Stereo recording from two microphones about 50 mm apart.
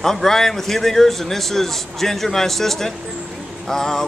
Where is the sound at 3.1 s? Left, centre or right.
Right.